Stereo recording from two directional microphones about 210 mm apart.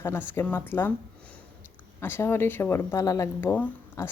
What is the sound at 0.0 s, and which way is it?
Speech, 10° left (ahead or behind).